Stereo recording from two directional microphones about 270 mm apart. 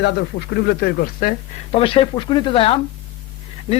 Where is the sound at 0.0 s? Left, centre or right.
Left.